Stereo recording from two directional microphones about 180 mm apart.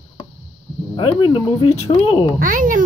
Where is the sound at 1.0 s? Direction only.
30° left (ahead or behind).